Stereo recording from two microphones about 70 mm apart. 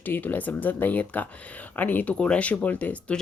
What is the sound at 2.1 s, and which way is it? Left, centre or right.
Speech, centre.